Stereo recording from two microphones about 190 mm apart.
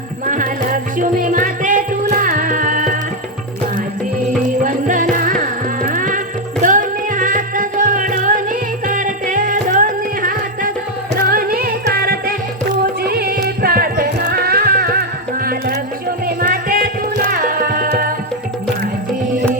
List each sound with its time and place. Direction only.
0.3 s music: 45° right (ahead or behind)
4.6 s music: 45° right (ahead or behind)